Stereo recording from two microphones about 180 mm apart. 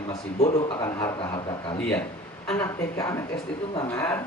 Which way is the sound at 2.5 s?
15° left (ahead or behind).